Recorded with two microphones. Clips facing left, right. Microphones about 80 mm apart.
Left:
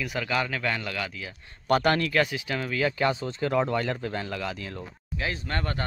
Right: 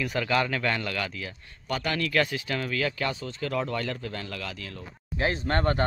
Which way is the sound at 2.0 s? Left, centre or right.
Left.